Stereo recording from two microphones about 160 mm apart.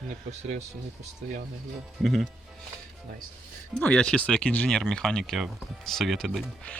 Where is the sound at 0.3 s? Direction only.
50° right (ahead or behind).